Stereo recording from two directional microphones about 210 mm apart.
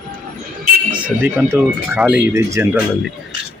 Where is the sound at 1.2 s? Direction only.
10° right (ahead or behind).